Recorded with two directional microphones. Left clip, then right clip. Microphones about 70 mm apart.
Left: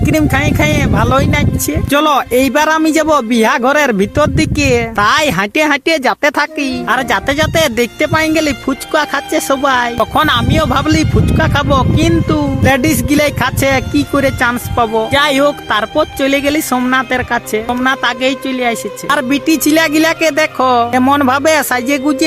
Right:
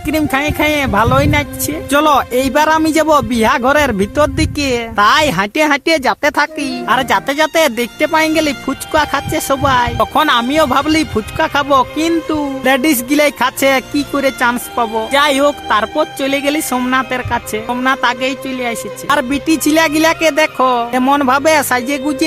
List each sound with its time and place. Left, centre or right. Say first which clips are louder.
0.1 s speech: left 1 dB; left
1.9 s a man's voice: even; left
21.2 s speech: even; left